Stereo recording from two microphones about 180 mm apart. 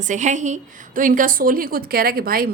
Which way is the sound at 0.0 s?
40° right (ahead or behind).